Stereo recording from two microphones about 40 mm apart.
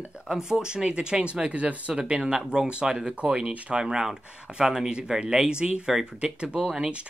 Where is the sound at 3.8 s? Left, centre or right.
Centre.